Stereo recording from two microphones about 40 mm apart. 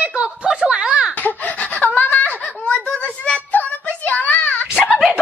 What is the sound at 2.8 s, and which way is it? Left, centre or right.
Child singing, left.